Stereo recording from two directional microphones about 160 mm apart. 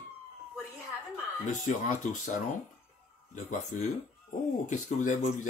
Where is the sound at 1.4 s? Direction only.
50° left (ahead or behind).